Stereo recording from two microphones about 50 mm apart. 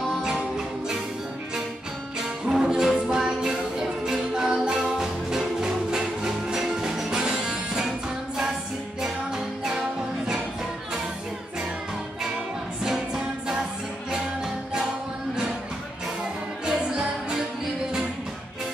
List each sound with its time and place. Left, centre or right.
2.4 s music: centre
9.0 s music: centre
12.8 s music: centre
16.6 s music: centre